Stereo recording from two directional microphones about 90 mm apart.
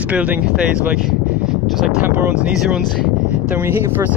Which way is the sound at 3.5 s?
25° right (ahead or behind).